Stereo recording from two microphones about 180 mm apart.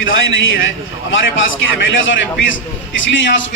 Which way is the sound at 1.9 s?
90° left.